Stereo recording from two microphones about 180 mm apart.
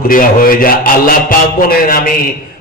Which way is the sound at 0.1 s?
50° left (ahead or behind).